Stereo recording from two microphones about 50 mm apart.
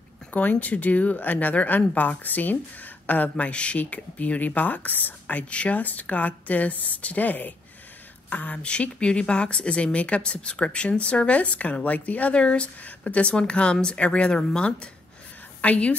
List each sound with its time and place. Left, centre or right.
0.3 s speech: left
15.6 s speech: left